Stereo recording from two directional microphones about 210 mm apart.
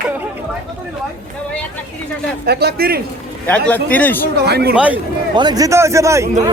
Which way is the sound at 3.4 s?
5° left (ahead or behind).